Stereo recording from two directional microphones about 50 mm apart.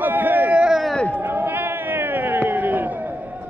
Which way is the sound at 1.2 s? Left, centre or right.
Right.